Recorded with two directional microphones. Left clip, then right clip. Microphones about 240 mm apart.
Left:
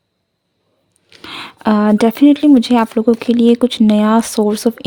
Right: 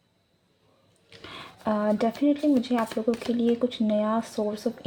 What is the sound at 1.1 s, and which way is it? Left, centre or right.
Speech, left.